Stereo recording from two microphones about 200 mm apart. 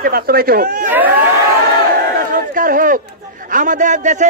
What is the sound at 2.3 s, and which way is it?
A man's voice, 45° right (ahead or behind).